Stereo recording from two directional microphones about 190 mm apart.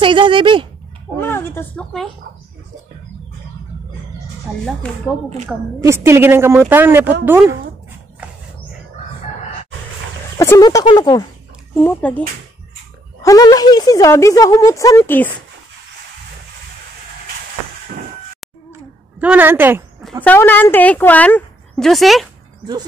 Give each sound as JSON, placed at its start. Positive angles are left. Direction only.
{"t": 0.0, "sound": "speech", "side_deg": -25}
{"t": 1.1, "sound": "a woman's voice", "side_deg": 10}
{"t": 4.6, "sound": "speech", "side_deg": 5}
{"t": 5.8, "sound": "a woman's voice", "side_deg": -15}
{"t": 10.3, "sound": "speech", "side_deg": 15}
{"t": 11.7, "sound": "speech", "side_deg": 10}
{"t": 13.2, "sound": "speech", "side_deg": 20}
{"t": 19.1, "sound": "a woman's voice", "side_deg": -10}
{"t": 20.0, "sound": "a sound", "side_deg": 0}
{"t": 20.3, "sound": "speech", "side_deg": 10}